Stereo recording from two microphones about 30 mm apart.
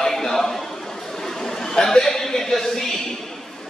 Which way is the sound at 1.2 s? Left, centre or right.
Centre.